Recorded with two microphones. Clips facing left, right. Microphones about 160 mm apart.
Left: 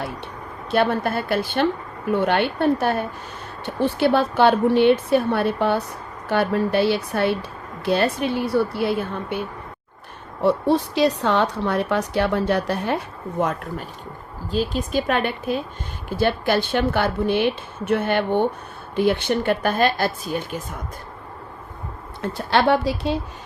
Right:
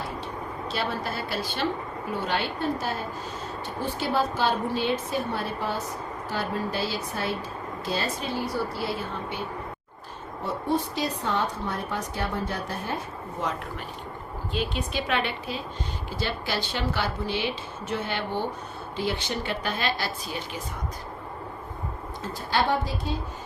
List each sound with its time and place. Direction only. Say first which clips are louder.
0.7 s speech: left 11 dB; 55° left (ahead or behind)
10.4 s speech: left 9 dB; 75° left (ahead or behind)
13.4 s speech: left 8 dB; 55° left (ahead or behind)
14.5 s a woman's voice: left 7 dB; 40° left (ahead or behind)
22.2 s speech: left 7 dB; 65° left (ahead or behind)